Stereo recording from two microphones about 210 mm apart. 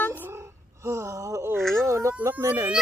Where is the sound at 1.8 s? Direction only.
15° right (ahead or behind).